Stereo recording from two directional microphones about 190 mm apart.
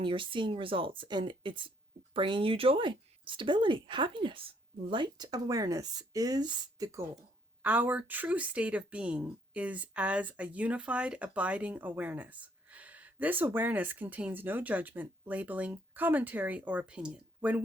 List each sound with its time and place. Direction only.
0.0 s speech: 25° right (ahead or behind); by 17.6 s 5° right (ahead or behind)